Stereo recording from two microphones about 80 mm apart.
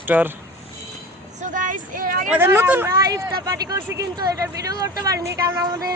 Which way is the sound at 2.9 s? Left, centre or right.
Right.